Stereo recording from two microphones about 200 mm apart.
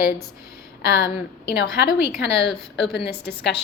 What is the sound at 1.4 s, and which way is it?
A woman's voice, 55° left (ahead or behind).